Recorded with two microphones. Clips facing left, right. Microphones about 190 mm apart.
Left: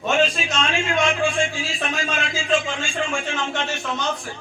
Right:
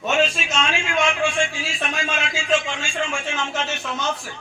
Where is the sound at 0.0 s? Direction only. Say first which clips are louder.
Left 1 dB; centre (ahead or behind).